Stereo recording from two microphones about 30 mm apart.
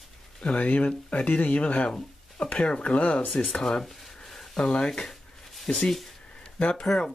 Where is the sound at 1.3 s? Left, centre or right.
Left.